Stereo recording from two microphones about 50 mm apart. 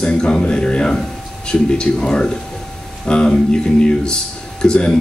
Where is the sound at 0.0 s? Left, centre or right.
Centre.